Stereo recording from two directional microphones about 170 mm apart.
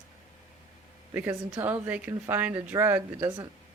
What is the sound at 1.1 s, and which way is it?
A woman's voice, 10° right (ahead or behind).